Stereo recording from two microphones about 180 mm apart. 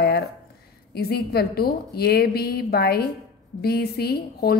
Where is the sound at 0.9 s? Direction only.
60° left (ahead or behind).